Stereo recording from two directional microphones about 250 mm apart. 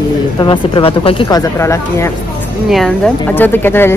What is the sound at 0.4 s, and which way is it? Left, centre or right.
A woman's voice, centre.